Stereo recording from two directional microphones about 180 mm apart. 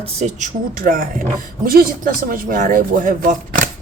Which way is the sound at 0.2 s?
45° right (ahead or behind).